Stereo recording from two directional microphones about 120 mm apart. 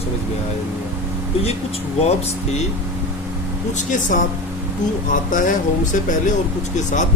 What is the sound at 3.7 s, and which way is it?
Speech, 90° left.